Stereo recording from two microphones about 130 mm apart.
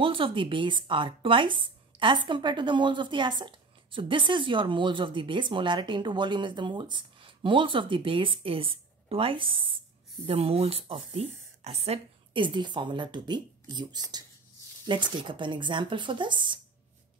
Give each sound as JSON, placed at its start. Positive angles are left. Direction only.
{"t": 0.0, "sound": "a woman's voice", "side_deg": -40}
{"t": 12.4, "sound": "a woman's voice", "side_deg": -35}